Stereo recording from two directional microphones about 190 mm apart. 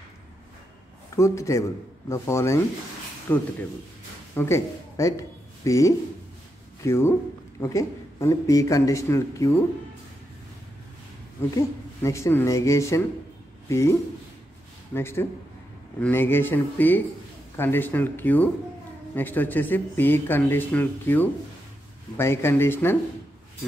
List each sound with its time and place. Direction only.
1.1 s speech: 15° left (ahead or behind)
11.5 s speech: 15° left (ahead or behind)
15.0 s speech: 15° left (ahead or behind)